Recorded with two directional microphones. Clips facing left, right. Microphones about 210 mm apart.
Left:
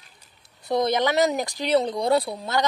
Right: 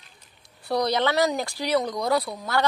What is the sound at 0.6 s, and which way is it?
Speech, 20° left (ahead or behind).